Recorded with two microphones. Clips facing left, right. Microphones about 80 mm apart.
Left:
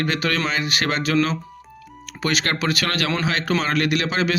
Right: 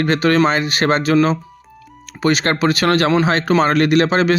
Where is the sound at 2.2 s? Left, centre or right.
Right.